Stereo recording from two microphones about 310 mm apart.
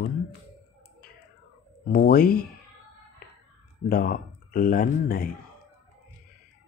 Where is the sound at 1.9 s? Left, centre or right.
Left.